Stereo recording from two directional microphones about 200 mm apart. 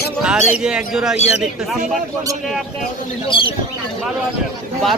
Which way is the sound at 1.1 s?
35° left (ahead or behind).